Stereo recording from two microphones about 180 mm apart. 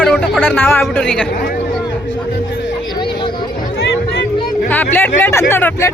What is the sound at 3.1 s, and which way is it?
Chatter, 25° left (ahead or behind).